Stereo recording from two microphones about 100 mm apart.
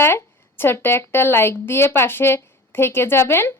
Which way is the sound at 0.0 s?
25° left (ahead or behind).